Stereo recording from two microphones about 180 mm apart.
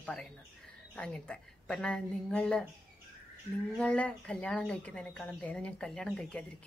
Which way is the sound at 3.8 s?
5° left (ahead or behind).